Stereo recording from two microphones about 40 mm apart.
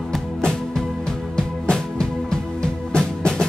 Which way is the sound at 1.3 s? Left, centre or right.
Centre.